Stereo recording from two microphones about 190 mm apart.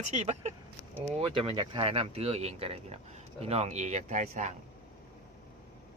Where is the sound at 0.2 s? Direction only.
35° right (ahead or behind).